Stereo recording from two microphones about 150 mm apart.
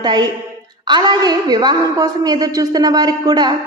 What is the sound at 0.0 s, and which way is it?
A woman's voice, 30° right (ahead or behind).